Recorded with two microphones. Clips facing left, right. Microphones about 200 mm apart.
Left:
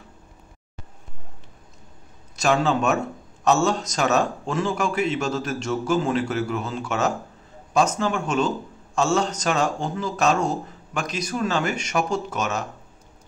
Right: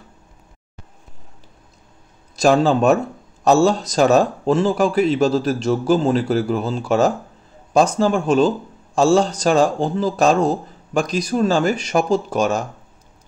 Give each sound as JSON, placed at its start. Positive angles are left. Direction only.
{"t": 2.3, "sound": "a man's voice", "side_deg": -35}